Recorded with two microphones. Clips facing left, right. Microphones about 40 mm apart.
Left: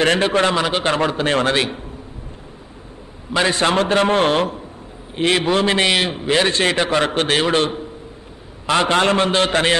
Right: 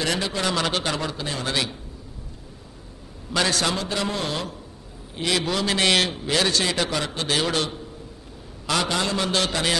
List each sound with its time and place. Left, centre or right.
0.0 s a man's voice: left
0.6 s a man's voice: left
0.8 s a man's voice: left
1.5 s a man's voice: left
3.3 s a man's voice: left
3.7 s a man's voice: left
5.9 s a man's voice: centre
6.1 s a man's voice: left
7.4 s a man's voice: left